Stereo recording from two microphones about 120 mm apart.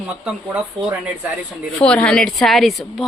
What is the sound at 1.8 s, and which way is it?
Speech, 10° left (ahead or behind).